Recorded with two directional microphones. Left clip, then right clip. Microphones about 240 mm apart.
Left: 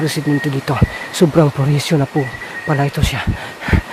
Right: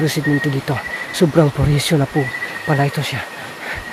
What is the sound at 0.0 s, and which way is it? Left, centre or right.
Speech, centre.